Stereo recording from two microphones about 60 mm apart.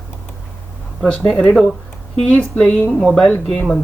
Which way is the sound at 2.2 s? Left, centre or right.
Centre.